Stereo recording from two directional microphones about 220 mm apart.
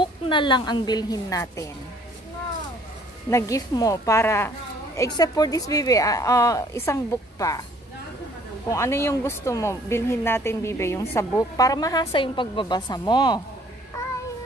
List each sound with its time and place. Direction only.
0.0 s a woman's voice: 20° left (ahead or behind)
3.3 s speech: 15° left (ahead or behind)
8.6 s speech: 10° left (ahead or behind)